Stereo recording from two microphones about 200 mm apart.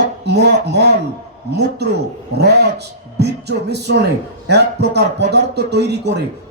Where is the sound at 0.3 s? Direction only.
55° right (ahead or behind).